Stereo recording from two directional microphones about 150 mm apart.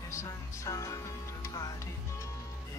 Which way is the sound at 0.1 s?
20° left (ahead or behind).